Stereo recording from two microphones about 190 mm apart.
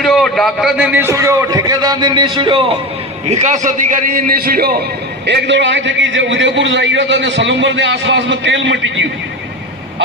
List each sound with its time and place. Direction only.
0.0 s a man's voice: centre (ahead or behind); by 2.7 s 25° right (ahead or behind)
3.2 s a man's voice: 40° right (ahead or behind)
5.2 s a man's voice: 65° right (ahead or behind)